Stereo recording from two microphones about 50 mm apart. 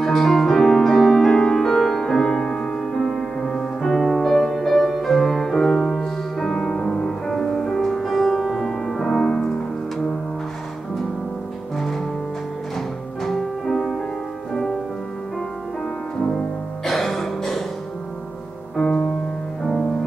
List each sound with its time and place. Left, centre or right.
0.0 s music: centre
11.7 s music: centre
16.8 s music: centre
18.8 s music: centre